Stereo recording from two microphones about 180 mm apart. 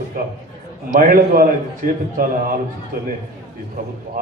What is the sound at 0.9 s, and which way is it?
Speech, 50° right (ahead or behind).